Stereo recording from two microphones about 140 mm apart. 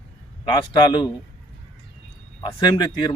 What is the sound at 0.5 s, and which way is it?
Speech, 35° left (ahead or behind).